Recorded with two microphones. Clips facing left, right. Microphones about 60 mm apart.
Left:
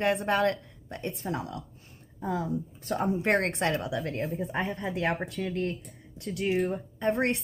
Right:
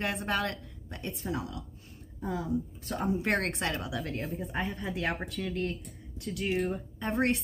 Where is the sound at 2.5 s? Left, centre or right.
Centre.